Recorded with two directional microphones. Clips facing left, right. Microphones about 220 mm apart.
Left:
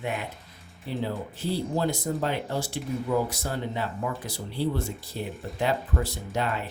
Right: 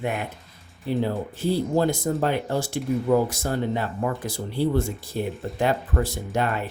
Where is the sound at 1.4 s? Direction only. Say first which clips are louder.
Right 6 dB; 45° right (ahead or behind).